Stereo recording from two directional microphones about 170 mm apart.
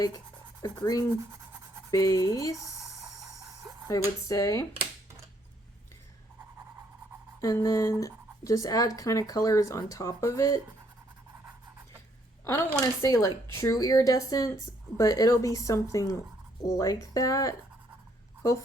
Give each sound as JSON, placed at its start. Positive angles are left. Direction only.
{"t": 0.6, "sound": "speech", "side_deg": 20}
{"t": 2.9, "sound": "a sound", "side_deg": 0}
{"t": 3.8, "sound": "speech", "side_deg": 20}
{"t": 7.4, "sound": "speech", "side_deg": 20}
{"t": 12.5, "sound": "speech", "side_deg": 15}